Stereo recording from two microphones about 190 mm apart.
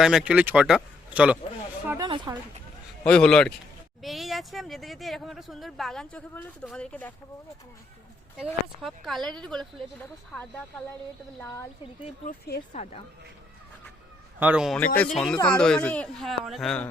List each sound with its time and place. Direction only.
0.0 s speech: 5° right (ahead or behind)
1.9 s speech: 20° right (ahead or behind)
3.0 s speech: 5° left (ahead or behind)
8.4 s speech: centre (ahead or behind)
12.0 s speech: 40° left (ahead or behind)
14.3 s speech: 5° right (ahead or behind)
14.8 s speech: 5° left (ahead or behind)